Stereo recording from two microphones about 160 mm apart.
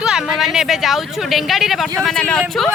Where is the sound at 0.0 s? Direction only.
5° right (ahead or behind).